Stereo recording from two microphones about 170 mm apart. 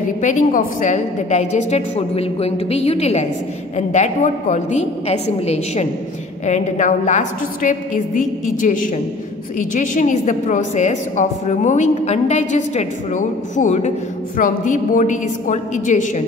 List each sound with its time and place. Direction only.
0.2 s a woman's voice: 50° left (ahead or behind)